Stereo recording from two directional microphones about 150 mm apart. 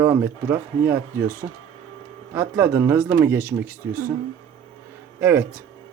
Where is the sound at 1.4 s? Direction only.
25° right (ahead or behind).